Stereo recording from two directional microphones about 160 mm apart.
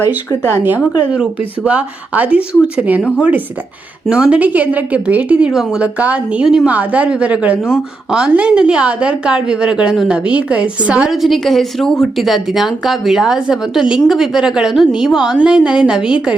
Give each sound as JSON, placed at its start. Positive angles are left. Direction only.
{"t": 0.3, "sound": "speech", "side_deg": 15}
{"t": 1.6, "sound": "a woman's voice", "side_deg": -10}